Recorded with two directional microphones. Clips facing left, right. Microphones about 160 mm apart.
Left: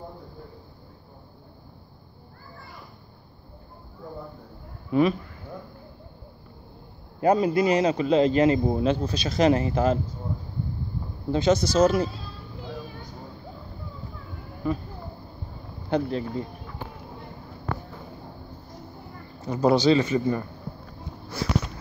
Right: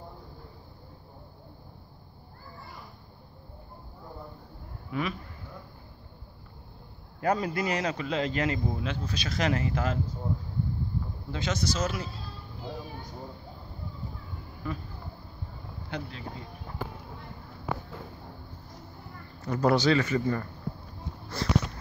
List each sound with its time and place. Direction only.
4.9 s speech: 30° left (ahead or behind)
7.2 s a man's voice: 25° left (ahead or behind)
11.3 s speech: 35° left (ahead or behind)
15.9 s speech: 40° left (ahead or behind)
17.7 s a sound: 5° right (ahead or behind)
19.4 s a man's voice: 20° left (ahead or behind)
21.3 s a sound: 10° left (ahead or behind)